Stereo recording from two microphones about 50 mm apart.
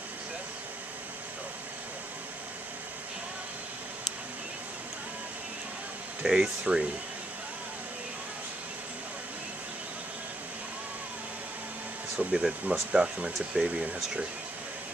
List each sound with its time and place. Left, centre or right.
6.2 s speech: centre
12.3 s speech: centre